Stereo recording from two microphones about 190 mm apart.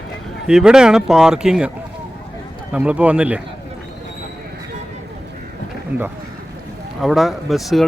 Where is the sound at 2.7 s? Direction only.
5° right (ahead or behind).